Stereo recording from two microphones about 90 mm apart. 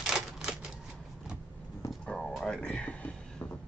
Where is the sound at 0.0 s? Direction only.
5° right (ahead or behind).